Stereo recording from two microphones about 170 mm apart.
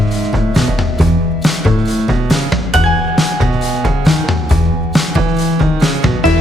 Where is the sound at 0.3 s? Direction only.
Centre (ahead or behind).